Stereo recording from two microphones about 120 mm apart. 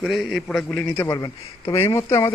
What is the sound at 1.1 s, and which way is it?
Speech, 30° left (ahead or behind).